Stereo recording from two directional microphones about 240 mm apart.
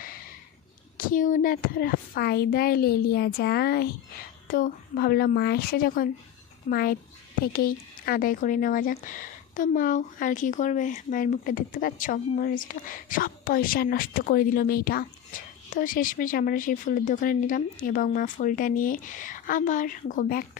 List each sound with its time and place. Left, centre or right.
0.9 s speech: left